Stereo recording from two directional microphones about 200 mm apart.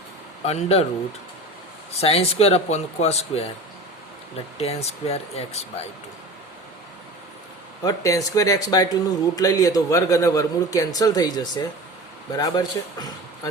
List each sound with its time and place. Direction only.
0.4 s speech: 30° left (ahead or behind)
1.9 s speech: 30° left (ahead or behind)
4.5 s speech: 30° left (ahead or behind)
7.9 s a man's voice: 15° left (ahead or behind)